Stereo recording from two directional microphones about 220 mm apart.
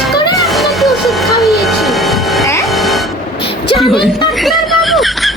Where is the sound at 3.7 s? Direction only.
Centre (ahead or behind).